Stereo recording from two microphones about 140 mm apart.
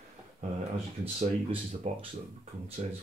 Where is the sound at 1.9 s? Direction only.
60° right (ahead or behind).